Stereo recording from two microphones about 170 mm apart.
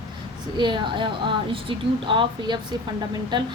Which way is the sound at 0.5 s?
25° right (ahead or behind).